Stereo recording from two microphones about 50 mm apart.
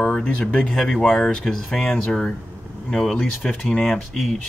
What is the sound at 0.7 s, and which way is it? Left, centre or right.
Speech, centre.